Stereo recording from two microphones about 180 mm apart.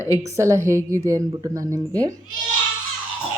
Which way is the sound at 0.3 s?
15° right (ahead or behind).